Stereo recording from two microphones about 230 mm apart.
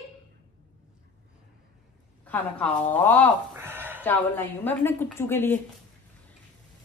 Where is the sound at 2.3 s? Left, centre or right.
Centre.